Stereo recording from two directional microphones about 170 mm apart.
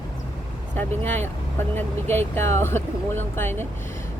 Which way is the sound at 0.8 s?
10° left (ahead or behind).